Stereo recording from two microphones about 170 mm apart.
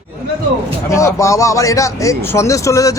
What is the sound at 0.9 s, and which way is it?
Speech, 20° left (ahead or behind).